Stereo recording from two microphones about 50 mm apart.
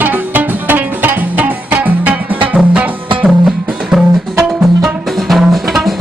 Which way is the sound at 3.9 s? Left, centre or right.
Centre.